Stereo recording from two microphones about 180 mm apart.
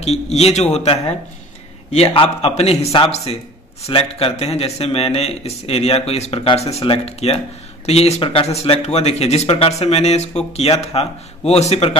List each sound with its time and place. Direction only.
0.0 s speech: 35° left (ahead or behind)